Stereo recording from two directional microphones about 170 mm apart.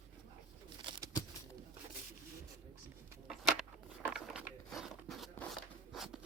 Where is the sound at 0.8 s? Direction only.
25° right (ahead or behind).